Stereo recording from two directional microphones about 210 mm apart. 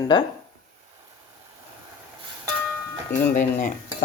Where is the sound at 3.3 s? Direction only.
40° left (ahead or behind).